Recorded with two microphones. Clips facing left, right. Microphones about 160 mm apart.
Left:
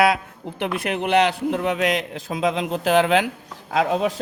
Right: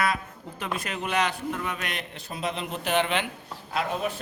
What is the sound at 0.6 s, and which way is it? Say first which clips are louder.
A man's voice: left 8 dB; 65° left (ahead or behind).